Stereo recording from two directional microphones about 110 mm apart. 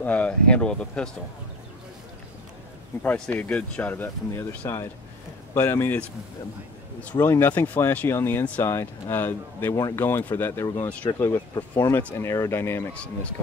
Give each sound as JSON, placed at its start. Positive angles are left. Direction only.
{"t": 0.0, "sound": "speech", "side_deg": 10}
{"t": 3.0, "sound": "speech", "side_deg": 15}
{"t": 12.9, "sound": "speech", "side_deg": 10}